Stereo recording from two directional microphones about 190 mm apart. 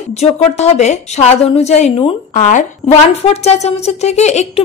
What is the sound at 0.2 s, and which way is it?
Speech, 35° left (ahead or behind).